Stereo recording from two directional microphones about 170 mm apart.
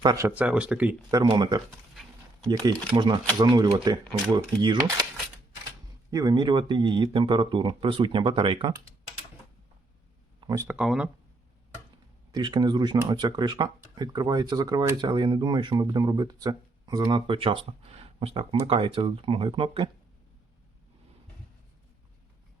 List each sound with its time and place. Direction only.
0.0 s speech: 20° right (ahead or behind)
1.1 s speech: 20° right (ahead or behind)
6.1 s speech: 25° right (ahead or behind)
10.7 s speech: 5° right (ahead or behind)
12.3 s speech: 25° right (ahead or behind)